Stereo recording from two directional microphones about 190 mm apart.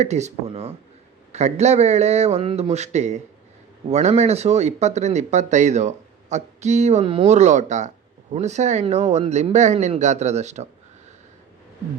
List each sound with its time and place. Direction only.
0.0 s speech: 35° right (ahead or behind)